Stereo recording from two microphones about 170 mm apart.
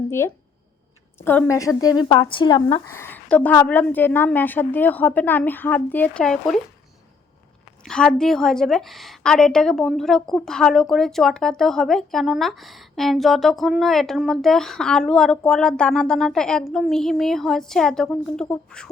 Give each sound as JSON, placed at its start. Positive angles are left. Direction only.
{"t": 0.1, "sound": "a woman's voice", "side_deg": 15}
{"t": 2.9, "sound": "a woman's voice", "side_deg": 15}
{"t": 7.9, "sound": "a woman's voice", "side_deg": 5}